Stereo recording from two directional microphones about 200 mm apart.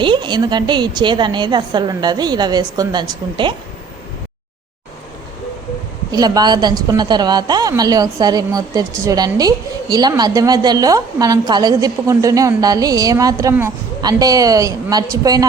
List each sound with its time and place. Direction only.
0.0 s a woman's voice: 25° right (ahead or behind)
6.1 s a woman's voice: 20° right (ahead or behind)